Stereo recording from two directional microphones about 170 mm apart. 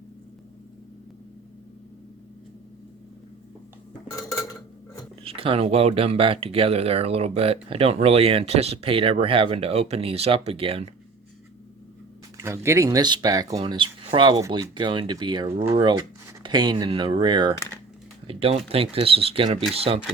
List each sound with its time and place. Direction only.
5.2 s speech: 35° right (ahead or behind)
12.4 s speech: 15° right (ahead or behind); by 20.0 s 35° right (ahead or behind)